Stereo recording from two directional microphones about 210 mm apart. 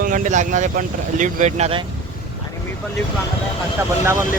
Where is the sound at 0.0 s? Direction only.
40° right (ahead or behind).